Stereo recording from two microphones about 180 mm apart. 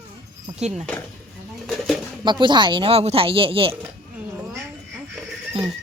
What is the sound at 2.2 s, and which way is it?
Speech, 25° right (ahead or behind).